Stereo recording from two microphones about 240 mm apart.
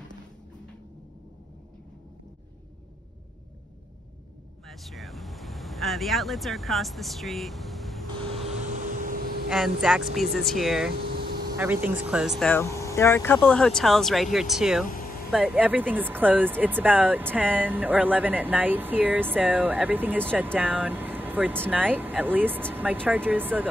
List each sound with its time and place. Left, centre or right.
4.6 s speech: centre
8.1 s vehicle: right
9.5 s speech: centre
10.9 s air conditioning: right
11.6 s speech: centre